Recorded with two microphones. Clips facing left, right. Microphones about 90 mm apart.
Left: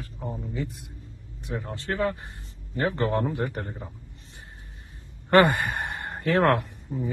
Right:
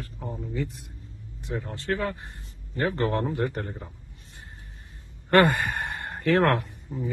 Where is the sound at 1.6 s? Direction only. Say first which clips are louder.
Left 2 dB; 20° left (ahead or behind); by 3.9 s 5° left (ahead or behind).